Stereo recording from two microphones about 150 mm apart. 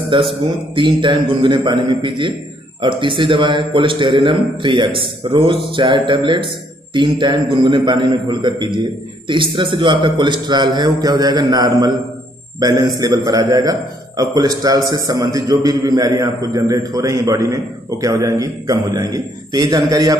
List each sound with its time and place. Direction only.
0.1 s a man's voice: 35° right (ahead or behind)